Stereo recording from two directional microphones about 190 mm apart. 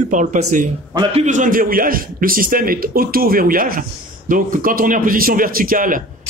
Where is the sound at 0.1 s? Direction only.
40° right (ahead or behind).